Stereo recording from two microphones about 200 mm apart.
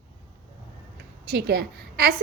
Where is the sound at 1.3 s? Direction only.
55° right (ahead or behind).